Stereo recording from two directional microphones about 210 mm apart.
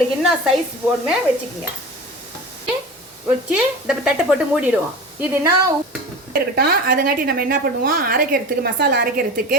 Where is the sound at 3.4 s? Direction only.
5° right (ahead or behind).